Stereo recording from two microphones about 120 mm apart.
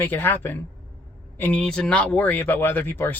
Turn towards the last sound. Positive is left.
turn(degrees=20)  # may be behind; listen again after turning